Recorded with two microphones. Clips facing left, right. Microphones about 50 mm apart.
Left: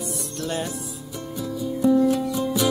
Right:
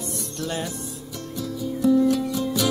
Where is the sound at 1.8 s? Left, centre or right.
Centre.